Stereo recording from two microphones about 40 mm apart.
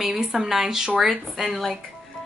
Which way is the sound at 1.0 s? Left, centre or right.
Centre.